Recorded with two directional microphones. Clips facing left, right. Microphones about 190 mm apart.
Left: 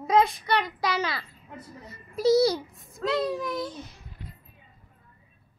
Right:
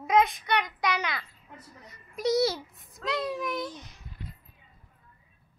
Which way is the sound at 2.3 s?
Centre (ahead or behind).